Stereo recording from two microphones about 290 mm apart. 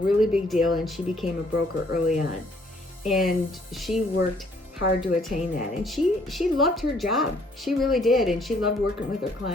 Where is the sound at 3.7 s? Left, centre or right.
Centre.